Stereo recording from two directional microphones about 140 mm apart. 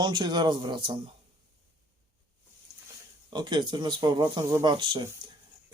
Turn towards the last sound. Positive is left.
turn(degrees=-35)  # may be behind; listen again after turning